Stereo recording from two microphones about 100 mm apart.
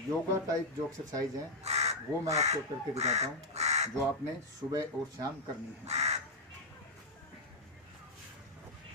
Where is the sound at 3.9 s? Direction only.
30° right (ahead or behind).